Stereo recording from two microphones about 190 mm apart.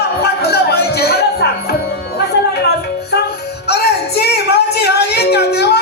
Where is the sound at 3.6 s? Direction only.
60° left (ahead or behind).